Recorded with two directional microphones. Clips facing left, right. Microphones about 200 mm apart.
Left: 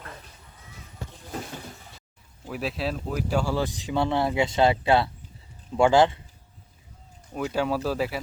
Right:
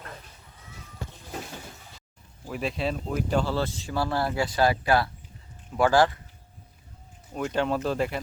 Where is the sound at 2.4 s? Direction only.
Centre (ahead or behind); by 6.2 s 20° left (ahead or behind).